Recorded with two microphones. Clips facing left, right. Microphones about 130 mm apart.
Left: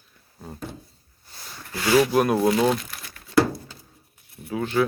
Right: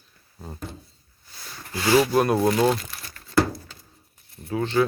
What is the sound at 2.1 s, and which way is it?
Speech, centre (ahead or behind).